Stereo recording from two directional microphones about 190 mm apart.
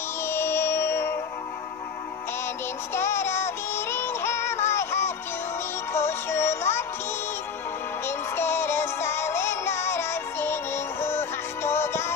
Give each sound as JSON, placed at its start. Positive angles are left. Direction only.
{"t": 0.2, "sound": "music", "side_deg": 15}
{"t": 2.9, "sound": "synthetic singing", "side_deg": 15}
{"t": 5.9, "sound": "music", "side_deg": 15}
{"t": 8.4, "sound": "music", "side_deg": 10}